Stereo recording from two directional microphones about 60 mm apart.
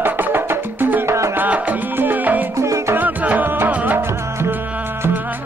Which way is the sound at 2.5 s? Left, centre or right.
Right.